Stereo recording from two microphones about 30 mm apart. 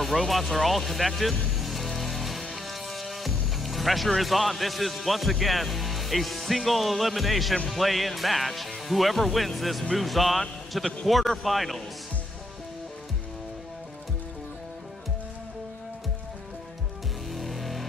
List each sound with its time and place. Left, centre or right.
0.0 s speech: centre
1.6 s music: centre
2.5 s speech: centre
17.3 s music: centre